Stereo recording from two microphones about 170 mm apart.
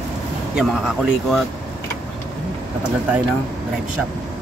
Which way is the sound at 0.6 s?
5° right (ahead or behind).